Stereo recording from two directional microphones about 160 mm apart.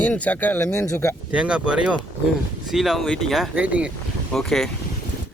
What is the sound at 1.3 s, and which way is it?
Speech, 5° right (ahead or behind).